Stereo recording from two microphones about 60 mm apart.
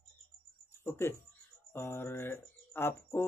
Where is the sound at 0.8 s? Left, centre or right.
Left.